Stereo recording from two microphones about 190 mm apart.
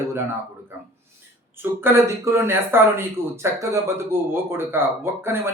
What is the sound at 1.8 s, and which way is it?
Speech, 15° right (ahead or behind).